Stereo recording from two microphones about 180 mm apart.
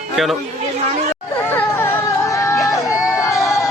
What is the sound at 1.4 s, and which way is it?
Hubbub, 10° left (ahead or behind).